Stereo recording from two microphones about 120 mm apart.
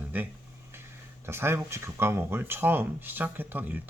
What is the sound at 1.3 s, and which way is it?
Speech, 20° right (ahead or behind).